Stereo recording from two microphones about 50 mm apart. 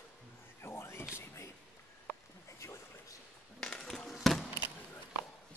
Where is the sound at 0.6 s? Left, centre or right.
Left.